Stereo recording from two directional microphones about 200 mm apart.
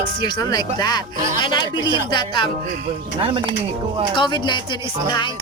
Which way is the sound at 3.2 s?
25° right (ahead or behind).